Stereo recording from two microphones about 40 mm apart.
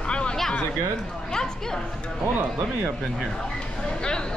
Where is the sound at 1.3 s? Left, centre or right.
Centre.